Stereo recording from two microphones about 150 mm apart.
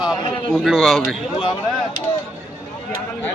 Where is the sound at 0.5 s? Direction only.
5° right (ahead or behind).